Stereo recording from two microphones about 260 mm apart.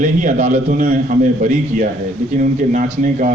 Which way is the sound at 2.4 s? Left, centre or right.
Right.